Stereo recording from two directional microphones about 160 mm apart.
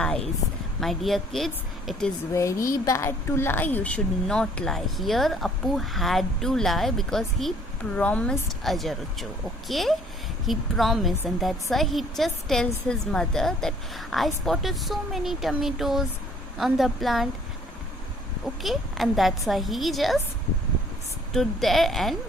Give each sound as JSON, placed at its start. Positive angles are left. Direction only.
{"t": 0.8, "sound": "speech", "side_deg": 0}
{"t": 2.3, "sound": "speech", "side_deg": 20}
{"t": 18.4, "sound": "speech", "side_deg": 0}
{"t": 21.3, "sound": "speech", "side_deg": 0}